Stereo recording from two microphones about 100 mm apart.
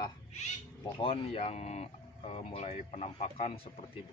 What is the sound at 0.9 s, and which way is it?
Speech, 70° left (ahead or behind).